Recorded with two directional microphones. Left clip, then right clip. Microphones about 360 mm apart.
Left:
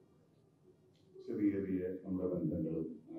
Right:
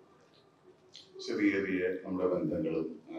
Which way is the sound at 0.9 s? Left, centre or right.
Centre.